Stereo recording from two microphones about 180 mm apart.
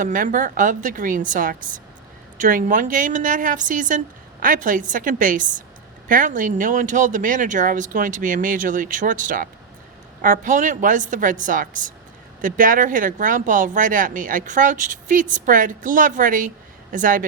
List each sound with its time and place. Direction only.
0.0 s speech: 45° right (ahead or behind)